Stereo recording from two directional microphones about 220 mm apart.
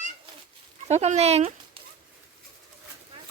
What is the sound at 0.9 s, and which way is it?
Speech, 30° right (ahead or behind).